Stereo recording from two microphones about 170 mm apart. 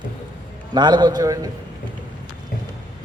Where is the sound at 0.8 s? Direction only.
25° right (ahead or behind).